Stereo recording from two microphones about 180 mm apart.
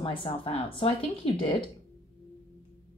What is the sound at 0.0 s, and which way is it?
A woman's voice, 30° left (ahead or behind).